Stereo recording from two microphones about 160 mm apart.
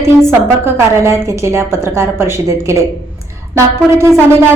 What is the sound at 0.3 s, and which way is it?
A woman's voice, 15° right (ahead or behind).